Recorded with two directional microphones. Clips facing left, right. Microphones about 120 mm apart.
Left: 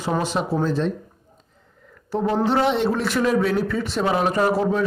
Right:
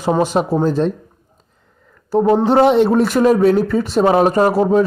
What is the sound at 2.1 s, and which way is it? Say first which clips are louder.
Speech: right 7 dB; 40° right (ahead or behind).